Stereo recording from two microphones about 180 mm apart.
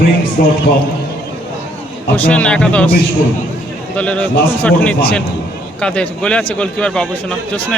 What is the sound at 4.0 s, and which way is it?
A man's voice, 10° left (ahead or behind).